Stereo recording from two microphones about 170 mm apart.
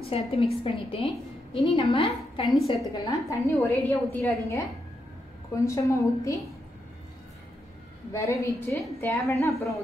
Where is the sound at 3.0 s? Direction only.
15° left (ahead or behind).